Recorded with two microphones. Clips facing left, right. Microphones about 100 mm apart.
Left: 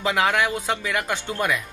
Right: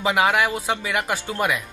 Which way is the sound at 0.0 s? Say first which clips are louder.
Right 2 dB; 15° right (ahead or behind).